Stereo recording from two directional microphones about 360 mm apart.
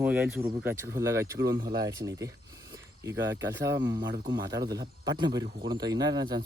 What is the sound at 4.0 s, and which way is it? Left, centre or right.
Speech, right.